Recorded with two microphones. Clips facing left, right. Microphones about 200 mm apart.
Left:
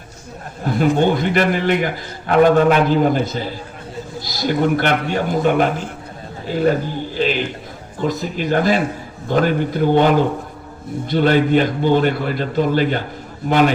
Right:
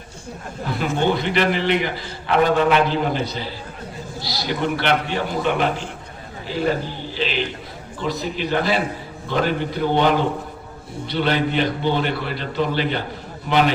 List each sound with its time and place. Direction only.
0.6 s a man's voice: 45° left (ahead or behind)
11.1 s a man's voice: 45° left (ahead or behind)